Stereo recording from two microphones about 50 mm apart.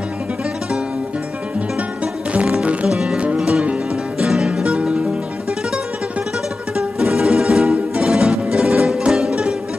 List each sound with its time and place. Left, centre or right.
2.3 s music: right
2.9 s music: centre
6.8 s music: centre